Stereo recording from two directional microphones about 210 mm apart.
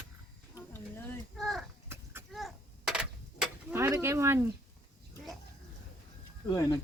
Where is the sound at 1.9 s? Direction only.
10° right (ahead or behind).